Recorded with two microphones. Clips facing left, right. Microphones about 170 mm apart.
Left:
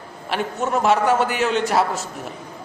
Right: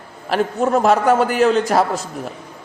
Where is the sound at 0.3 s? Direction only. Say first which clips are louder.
Right 6 dB; 40° right (ahead or behind).